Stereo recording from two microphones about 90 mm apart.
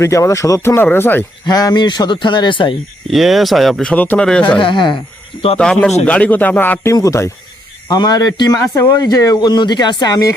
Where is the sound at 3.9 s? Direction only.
15° left (ahead or behind).